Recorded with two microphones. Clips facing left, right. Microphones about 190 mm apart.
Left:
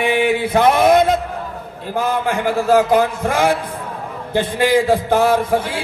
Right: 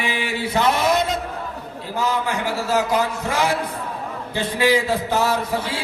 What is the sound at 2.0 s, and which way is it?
A man's voice, 55° left (ahead or behind).